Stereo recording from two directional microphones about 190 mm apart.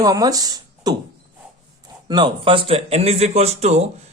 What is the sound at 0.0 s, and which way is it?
Speech, 20° right (ahead or behind).